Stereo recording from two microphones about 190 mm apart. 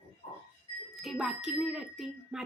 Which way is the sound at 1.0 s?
Centre (ahead or behind).